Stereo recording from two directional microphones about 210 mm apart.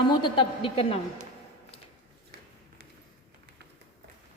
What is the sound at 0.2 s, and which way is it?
Speech, 20° left (ahead or behind).